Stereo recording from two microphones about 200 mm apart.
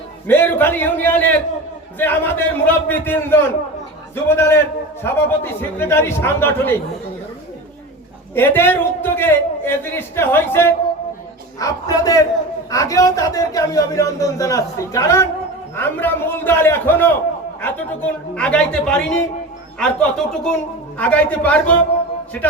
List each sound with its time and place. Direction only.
0.3 s speech: 10° left (ahead or behind)
8.4 s a man's voice: 10° left (ahead or behind)